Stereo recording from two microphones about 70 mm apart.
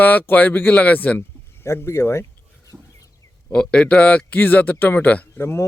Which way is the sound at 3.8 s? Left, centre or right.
Centre.